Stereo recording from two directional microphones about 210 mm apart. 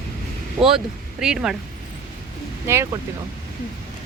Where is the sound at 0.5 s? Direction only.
5° right (ahead or behind).